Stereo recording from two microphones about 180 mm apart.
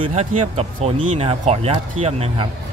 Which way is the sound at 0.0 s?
35° right (ahead or behind).